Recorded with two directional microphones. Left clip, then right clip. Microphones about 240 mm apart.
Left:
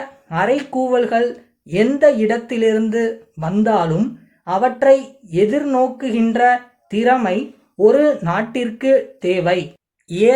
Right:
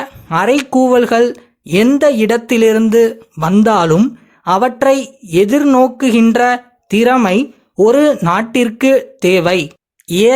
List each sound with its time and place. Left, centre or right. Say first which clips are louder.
0.3 s speech: right 5 dB; right